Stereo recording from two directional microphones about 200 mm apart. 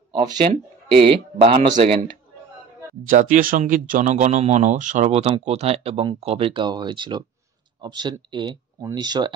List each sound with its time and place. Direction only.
0.9 s speech: 25° right (ahead or behind)
3.1 s speech: 40° right (ahead or behind); by 9.3 s 20° right (ahead or behind)